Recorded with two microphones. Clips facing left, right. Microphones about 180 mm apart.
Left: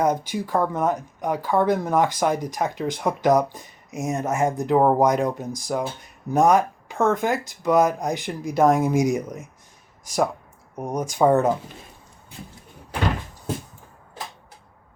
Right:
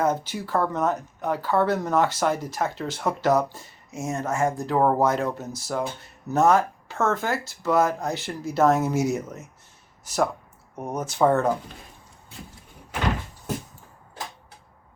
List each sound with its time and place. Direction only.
0.0 s speech: 15° left (ahead or behind)